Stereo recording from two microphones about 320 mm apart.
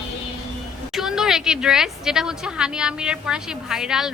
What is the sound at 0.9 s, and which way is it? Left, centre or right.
A woman's voice, centre.